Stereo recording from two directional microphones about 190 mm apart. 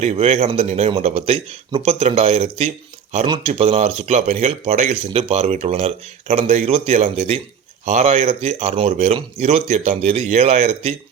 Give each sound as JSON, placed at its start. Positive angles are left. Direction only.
{"t": 0.0, "sound": "speech", "side_deg": -35}